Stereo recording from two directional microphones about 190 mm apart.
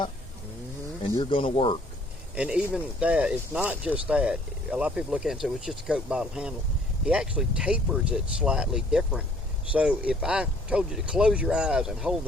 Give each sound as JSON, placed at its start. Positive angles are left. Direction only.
{"t": 1.1, "sound": "speech", "side_deg": 25}
{"t": 2.3, "sound": "speech", "side_deg": -5}